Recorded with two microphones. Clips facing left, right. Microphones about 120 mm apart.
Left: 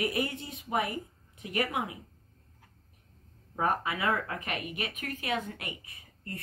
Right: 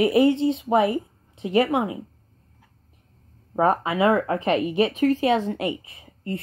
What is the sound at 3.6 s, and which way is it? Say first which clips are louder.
Speech: right 10 dB; 25° right (ahead or behind).